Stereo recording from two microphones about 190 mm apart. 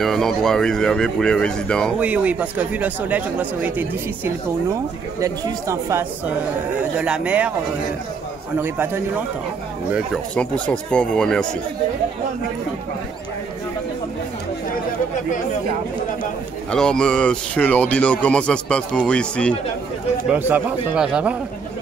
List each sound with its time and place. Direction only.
0.0 s speech: centre (ahead or behind)
2.0 s speech: 5° right (ahead or behind)
6.8 s speech: 5° right (ahead or behind)
8.5 s speech: 10° right (ahead or behind)
9.9 s speech: 5° left (ahead or behind)
16.7 s speech: 5° left (ahead or behind)
20.2 s speech: 10° right (ahead or behind)